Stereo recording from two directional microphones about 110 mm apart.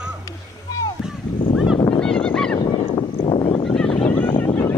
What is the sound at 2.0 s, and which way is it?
Honk, 5° left (ahead or behind).